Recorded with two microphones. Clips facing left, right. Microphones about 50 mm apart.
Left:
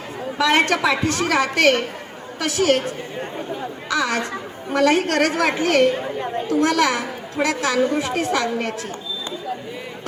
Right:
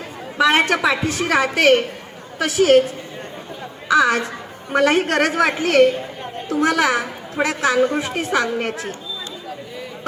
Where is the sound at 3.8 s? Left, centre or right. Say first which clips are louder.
Right 6 dB; centre.